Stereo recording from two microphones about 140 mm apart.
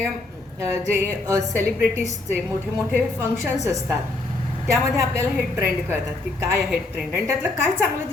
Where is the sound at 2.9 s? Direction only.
15° right (ahead or behind).